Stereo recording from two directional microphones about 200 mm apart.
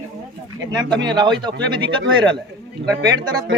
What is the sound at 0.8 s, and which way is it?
A man's voice, 20° right (ahead or behind).